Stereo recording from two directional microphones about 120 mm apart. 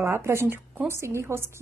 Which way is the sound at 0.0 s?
20° right (ahead or behind).